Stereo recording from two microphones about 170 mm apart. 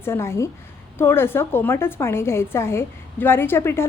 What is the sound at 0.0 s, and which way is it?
A woman's voice, 15° left (ahead or behind).